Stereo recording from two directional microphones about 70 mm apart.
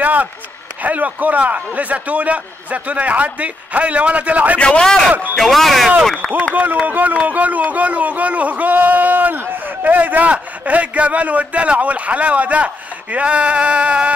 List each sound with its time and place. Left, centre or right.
0.0 s a man's voice: right
4.6 s a man's voice: centre
6.5 s speech: right